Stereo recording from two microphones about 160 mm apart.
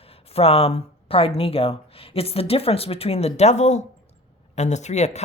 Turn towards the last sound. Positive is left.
turn(degrees=45)  # may be behind; listen again after turning